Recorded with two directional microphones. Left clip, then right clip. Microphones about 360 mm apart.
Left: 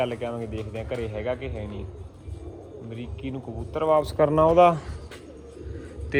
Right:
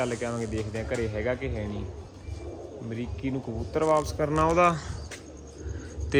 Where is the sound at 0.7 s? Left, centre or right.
Right.